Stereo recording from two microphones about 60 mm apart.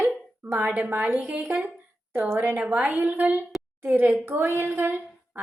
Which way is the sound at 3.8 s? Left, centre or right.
Right.